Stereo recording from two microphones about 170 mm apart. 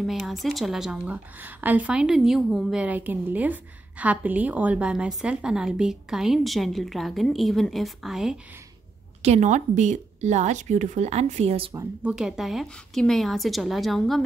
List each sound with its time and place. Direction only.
0.0 s a woman's voice: centre (ahead or behind)
9.2 s a woman's voice: 40° right (ahead or behind)
12.0 s a woman's voice: 5° right (ahead or behind)